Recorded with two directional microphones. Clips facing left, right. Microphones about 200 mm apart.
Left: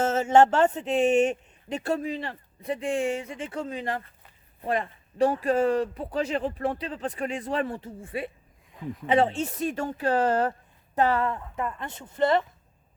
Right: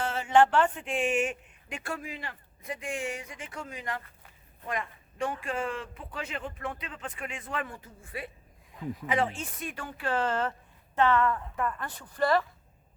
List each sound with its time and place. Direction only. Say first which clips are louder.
0.0 s a sound: left 4 dB; 45° left (ahead or behind)
0.6 s speech: left 6 dB; 25° left (ahead or behind)
0.9 s speech: left 7 dB; 40° left (ahead or behind)
11.5 s speech: left 1 dB; 20° left (ahead or behind)